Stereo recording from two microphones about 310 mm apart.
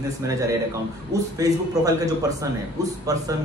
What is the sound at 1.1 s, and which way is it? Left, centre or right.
Speech, centre.